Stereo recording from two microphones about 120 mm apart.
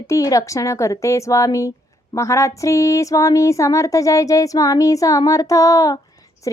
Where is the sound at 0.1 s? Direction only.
30° left (ahead or behind).